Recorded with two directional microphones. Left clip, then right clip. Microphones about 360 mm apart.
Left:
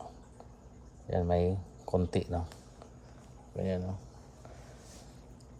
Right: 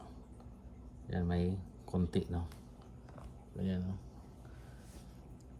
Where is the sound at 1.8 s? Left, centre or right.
Centre.